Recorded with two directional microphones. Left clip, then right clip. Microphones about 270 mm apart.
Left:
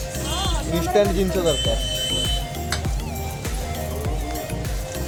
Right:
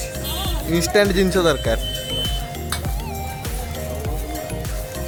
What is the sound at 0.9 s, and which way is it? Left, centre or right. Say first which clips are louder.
Speech: right 2 dB; right.